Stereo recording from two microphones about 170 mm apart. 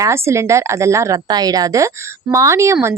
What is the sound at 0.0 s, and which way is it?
Speech, 15° right (ahead or behind).